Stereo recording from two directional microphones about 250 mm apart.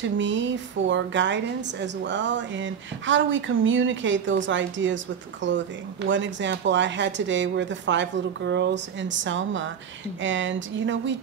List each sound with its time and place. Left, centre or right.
0.2 s a woman's voice: right